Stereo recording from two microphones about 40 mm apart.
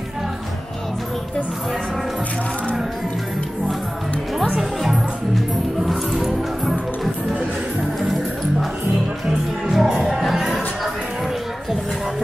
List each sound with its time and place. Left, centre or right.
4.6 s music: centre
9.7 s music: centre